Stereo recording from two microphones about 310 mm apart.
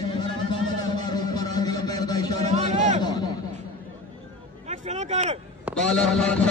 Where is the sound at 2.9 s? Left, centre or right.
Centre.